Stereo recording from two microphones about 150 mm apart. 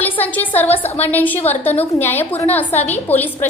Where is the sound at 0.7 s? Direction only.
45° left (ahead or behind).